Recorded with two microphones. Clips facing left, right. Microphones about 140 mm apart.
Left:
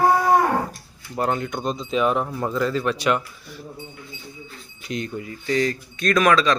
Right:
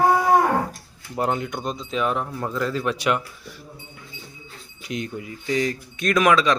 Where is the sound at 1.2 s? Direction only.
15° right (ahead or behind).